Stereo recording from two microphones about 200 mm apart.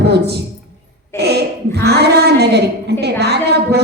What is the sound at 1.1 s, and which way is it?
A woman's voice, 55° right (ahead or behind).